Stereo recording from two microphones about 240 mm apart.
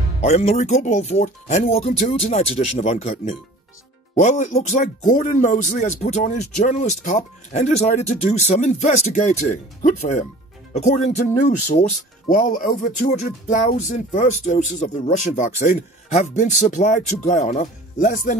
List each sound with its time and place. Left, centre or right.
0.2 s speech: left